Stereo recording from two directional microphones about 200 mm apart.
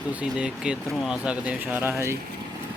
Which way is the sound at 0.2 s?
5° right (ahead or behind).